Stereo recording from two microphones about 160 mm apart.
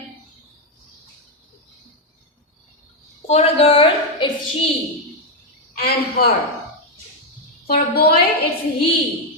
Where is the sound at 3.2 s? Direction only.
40° left (ahead or behind).